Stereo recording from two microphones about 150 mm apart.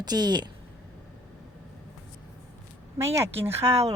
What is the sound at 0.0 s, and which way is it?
Speech, 30° right (ahead or behind).